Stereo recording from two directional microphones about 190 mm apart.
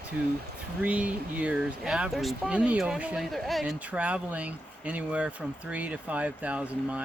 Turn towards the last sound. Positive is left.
turn(degrees=-5)  # may be behind; listen again after turning